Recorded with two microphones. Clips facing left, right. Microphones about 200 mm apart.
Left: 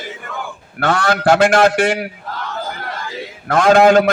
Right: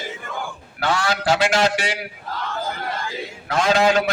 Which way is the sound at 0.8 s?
55° left (ahead or behind).